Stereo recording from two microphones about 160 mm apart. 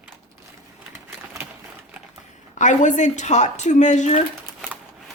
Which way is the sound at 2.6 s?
50° left (ahead or behind).